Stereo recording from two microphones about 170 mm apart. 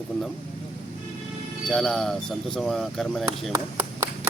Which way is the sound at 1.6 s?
Centre (ahead or behind).